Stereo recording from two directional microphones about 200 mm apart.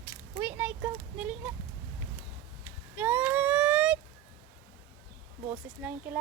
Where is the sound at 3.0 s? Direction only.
10° right (ahead or behind).